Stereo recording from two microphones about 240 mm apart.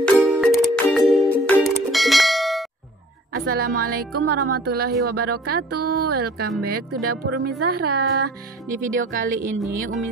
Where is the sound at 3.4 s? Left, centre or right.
Right.